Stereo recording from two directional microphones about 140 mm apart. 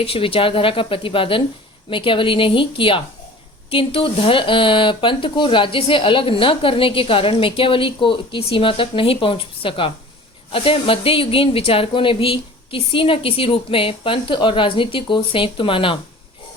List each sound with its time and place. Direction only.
0.0 s speech: 40° left (ahead or behind)